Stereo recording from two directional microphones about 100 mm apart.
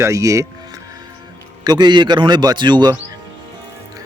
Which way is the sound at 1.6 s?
45° right (ahead or behind).